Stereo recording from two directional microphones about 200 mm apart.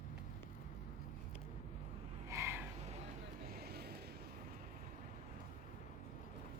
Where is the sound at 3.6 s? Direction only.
50° right (ahead or behind).